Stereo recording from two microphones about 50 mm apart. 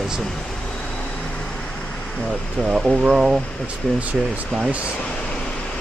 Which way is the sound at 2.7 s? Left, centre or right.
Centre.